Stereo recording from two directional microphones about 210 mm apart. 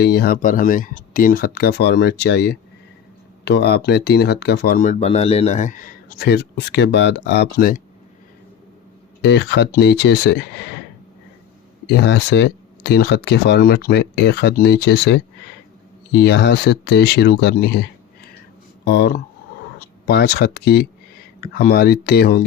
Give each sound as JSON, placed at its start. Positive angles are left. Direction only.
{"t": 0.0, "sound": "speech", "side_deg": 50}
{"t": 9.2, "sound": "speech", "side_deg": 55}
{"t": 11.9, "sound": "speech", "side_deg": 55}
{"t": 18.9, "sound": "speech", "side_deg": 50}